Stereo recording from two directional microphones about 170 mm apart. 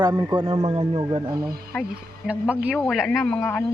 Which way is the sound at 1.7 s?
10° left (ahead or behind).